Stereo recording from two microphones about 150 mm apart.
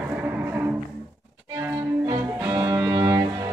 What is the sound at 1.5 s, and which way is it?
Music, 15° right (ahead or behind).